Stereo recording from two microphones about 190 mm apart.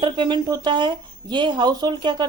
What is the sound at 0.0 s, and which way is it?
A woman's voice, 25° right (ahead or behind).